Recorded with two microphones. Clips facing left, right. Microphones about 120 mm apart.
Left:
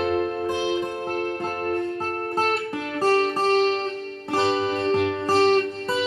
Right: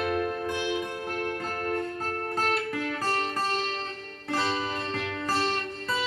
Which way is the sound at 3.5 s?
60° left (ahead or behind).